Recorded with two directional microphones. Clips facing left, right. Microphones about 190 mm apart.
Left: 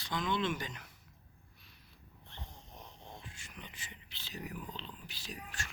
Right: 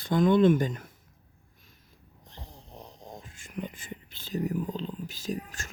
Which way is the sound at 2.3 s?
35° right (ahead or behind).